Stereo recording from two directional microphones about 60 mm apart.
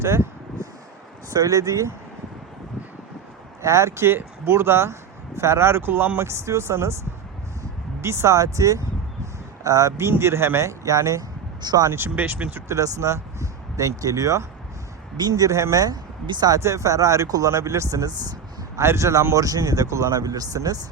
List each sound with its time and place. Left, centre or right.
0.0 s speech: right
1.3 s speech: right
3.6 s speech: right
6.1 s speech: right
8.0 s speech: right
11.9 s speech: right
12.1 s speech: right
12.6 s speech: right
17.6 s speech: right
18.8 s speech: right
19.3 s speech: right